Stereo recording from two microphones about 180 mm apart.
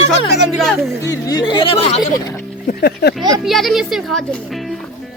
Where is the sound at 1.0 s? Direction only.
20° left (ahead or behind).